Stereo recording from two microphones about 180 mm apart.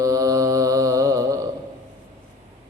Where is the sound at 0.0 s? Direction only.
20° right (ahead or behind).